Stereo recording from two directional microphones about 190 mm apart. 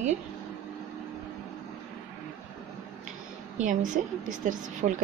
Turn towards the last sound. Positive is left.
turn(degrees=-40)  # may be behind; listen again after turning